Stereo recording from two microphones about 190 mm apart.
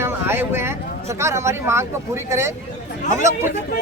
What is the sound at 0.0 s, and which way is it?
Speech, 15° right (ahead or behind).